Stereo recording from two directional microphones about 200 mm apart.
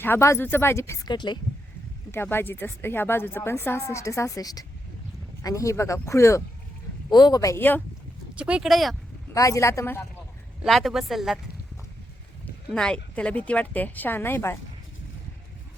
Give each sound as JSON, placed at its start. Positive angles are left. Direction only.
{"t": 0.0, "sound": "speech", "side_deg": 10}
{"t": 2.1, "sound": "speech", "side_deg": 10}
{"t": 8.4, "sound": "speech", "side_deg": -5}
{"t": 9.3, "sound": "speech", "side_deg": 15}
{"t": 10.6, "sound": "speech", "side_deg": 0}
{"t": 12.7, "sound": "speech", "side_deg": 5}